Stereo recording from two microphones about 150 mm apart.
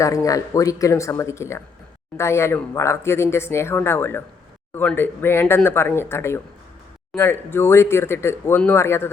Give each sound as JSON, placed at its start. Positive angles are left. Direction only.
{"t": 0.0, "sound": "speech", "side_deg": 20}